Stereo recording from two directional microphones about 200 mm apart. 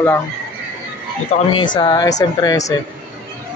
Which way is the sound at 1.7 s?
20° left (ahead or behind).